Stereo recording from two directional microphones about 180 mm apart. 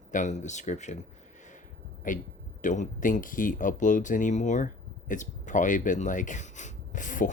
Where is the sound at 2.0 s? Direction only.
45° left (ahead or behind).